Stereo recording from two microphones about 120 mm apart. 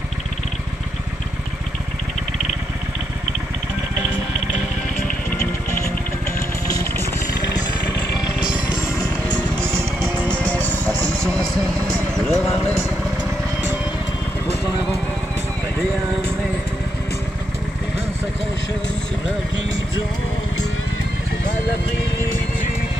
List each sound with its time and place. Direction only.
8.6 s music: 35° left (ahead or behind)
9.6 s music: 20° right (ahead or behind)
10.3 s music: 10° left (ahead or behind)
10.8 s music: 25° right (ahead or behind)
11.1 s vehicle: 5° left (ahead or behind)